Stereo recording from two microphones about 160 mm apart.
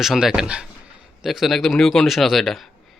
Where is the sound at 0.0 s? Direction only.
Centre (ahead or behind).